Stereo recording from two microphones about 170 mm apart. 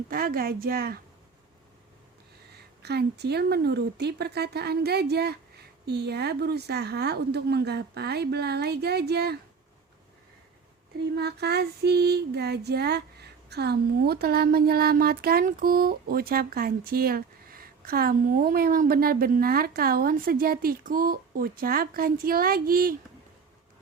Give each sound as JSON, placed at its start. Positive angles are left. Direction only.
{"t": 0.1, "sound": "female singing", "side_deg": -60}
{"t": 2.8, "sound": "a woman's voice", "side_deg": -75}
{"t": 11.1, "sound": "female singing", "side_deg": -75}